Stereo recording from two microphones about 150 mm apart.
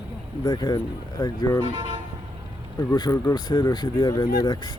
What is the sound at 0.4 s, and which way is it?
Speech, 25° left (ahead or behind).